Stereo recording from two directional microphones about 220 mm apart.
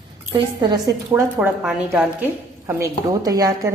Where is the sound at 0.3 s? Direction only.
20° right (ahead or behind).